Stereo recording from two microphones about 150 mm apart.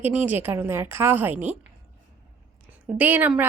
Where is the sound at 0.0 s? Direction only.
10° right (ahead or behind).